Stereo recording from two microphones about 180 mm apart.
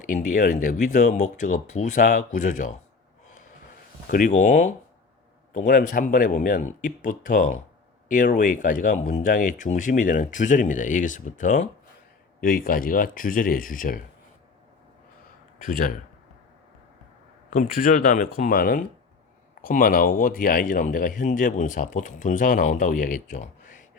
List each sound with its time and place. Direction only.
0.0 s speech: 45° left (ahead or behind)
4.1 s speech: 45° left (ahead or behind)
15.6 s speech: 50° left (ahead or behind)
17.5 s speech: 45° left (ahead or behind)